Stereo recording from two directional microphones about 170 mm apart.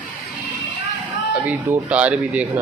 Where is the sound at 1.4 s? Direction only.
10° right (ahead or behind).